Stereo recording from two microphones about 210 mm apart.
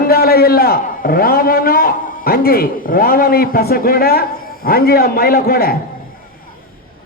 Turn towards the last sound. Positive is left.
turn(degrees=45)  # may be behind; listen again after turning